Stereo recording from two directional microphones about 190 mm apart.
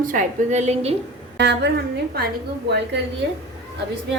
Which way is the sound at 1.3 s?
60° right (ahead or behind).